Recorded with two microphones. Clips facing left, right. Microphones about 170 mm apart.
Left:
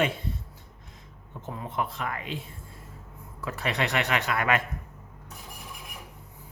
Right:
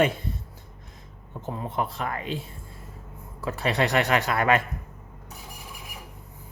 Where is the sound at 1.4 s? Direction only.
35° right (ahead or behind).